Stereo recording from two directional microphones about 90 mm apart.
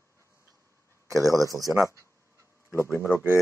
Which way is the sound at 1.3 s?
40° right (ahead or behind).